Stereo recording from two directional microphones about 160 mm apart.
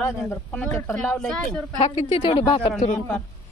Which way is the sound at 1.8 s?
40° left (ahead or behind).